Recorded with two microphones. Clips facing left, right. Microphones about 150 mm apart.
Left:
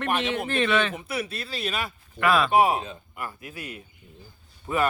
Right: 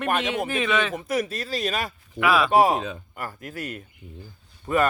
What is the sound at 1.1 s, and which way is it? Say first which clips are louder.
Speech: right 5 dB; 40° right (ahead or behind).